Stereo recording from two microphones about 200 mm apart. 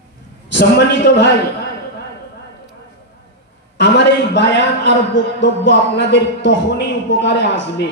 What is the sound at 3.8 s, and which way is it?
A man's voice, 60° left (ahead or behind).